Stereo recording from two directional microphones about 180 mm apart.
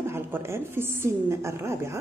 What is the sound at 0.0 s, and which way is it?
A woman's voice, 15° right (ahead or behind).